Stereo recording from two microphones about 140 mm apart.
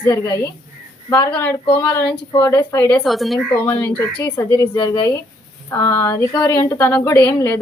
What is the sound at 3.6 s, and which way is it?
A woman's voice, 15° left (ahead or behind).